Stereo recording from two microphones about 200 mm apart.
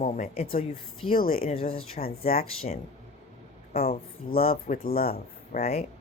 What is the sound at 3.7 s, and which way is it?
Speech, 50° left (ahead or behind).